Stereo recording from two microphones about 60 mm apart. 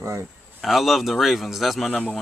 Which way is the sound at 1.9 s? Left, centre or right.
Centre.